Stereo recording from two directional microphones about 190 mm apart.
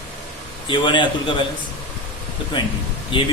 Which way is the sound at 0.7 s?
25° left (ahead or behind).